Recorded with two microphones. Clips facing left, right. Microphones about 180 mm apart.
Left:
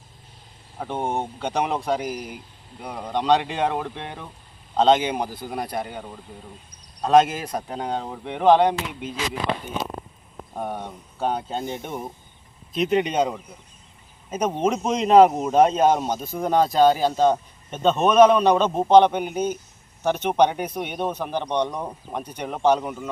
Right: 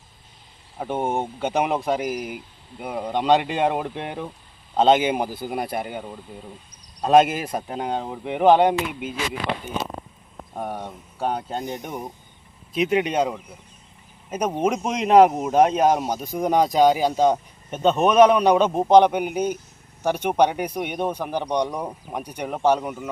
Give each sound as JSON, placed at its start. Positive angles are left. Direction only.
{"t": 0.8, "sound": "speech", "side_deg": -5}
{"t": 7.1, "sound": "speech", "side_deg": -10}
{"t": 10.5, "sound": "speech", "side_deg": -5}